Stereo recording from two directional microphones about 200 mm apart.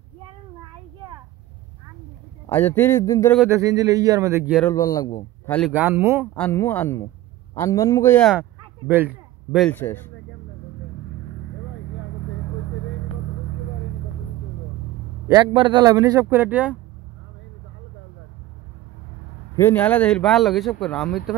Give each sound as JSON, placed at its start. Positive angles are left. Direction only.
{"t": 2.5, "sound": "speech", "side_deg": 10}
{"t": 3.4, "sound": "speech", "side_deg": -15}
{"t": 4.6, "sound": "speech", "side_deg": 15}
{"t": 5.7, "sound": "speech", "side_deg": -10}
{"t": 6.3, "sound": "speech", "side_deg": 10}
{"t": 8.3, "sound": "a sound", "side_deg": -10}
{"t": 9.7, "sound": "speech", "side_deg": 10}
{"t": 15.2, "sound": "speech", "side_deg": -20}
{"t": 19.5, "sound": "speech", "side_deg": 10}